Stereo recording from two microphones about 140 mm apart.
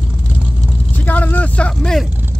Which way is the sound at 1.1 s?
10° left (ahead or behind).